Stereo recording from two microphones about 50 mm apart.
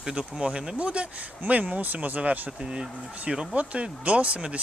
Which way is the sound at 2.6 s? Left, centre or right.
Centre.